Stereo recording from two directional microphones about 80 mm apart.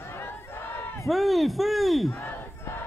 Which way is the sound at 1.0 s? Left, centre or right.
Centre.